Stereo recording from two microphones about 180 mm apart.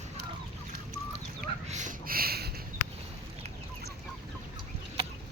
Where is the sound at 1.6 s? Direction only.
40° right (ahead or behind); by 2.5 s 60° right (ahead or behind).